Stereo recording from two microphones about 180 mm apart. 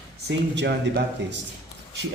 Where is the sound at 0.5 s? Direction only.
75° right (ahead or behind).